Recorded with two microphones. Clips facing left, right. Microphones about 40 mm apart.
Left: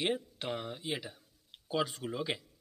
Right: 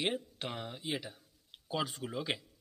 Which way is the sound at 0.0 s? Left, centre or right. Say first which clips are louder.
Left 1 dB; centre.